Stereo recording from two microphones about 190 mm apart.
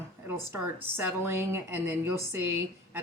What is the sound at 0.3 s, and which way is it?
Speech, 10° right (ahead or behind).